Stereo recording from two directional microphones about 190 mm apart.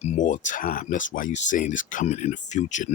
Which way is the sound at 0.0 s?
40° left (ahead or behind).